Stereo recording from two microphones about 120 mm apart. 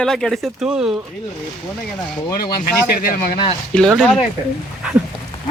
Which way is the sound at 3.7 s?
10° left (ahead or behind).